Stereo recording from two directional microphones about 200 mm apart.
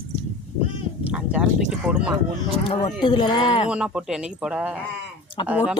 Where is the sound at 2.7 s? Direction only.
25° left (ahead or behind).